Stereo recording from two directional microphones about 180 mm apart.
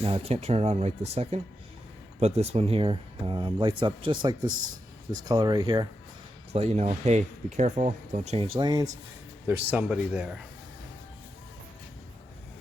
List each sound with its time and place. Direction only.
0.0 s speech: 30° right (ahead or behind)
6.5 s speech: 35° right (ahead or behind); by 8.9 s 20° right (ahead or behind)
9.5 s a man's voice: 10° right (ahead or behind)